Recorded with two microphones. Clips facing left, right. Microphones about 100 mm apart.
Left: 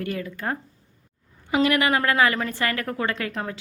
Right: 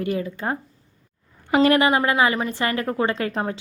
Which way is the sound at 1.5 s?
45° right (ahead or behind).